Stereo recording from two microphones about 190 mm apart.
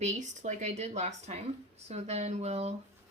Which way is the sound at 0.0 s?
40° right (ahead or behind).